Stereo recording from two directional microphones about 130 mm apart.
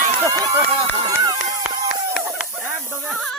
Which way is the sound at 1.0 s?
30° right (ahead or behind).